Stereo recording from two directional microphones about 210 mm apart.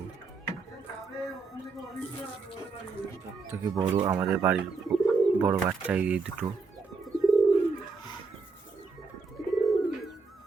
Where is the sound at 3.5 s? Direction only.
15° right (ahead or behind).